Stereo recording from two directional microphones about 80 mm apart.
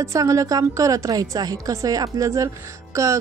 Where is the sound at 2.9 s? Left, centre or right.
Right.